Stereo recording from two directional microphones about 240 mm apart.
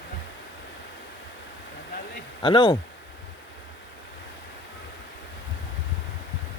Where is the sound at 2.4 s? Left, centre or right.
Left.